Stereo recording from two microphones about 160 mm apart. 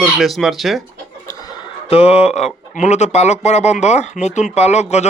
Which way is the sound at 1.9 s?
40° left (ahead or behind).